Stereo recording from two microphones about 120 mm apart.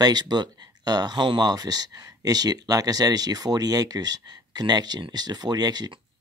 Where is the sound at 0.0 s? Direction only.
35° right (ahead or behind).